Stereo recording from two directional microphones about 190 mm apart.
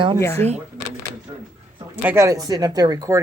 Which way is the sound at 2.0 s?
15° right (ahead or behind).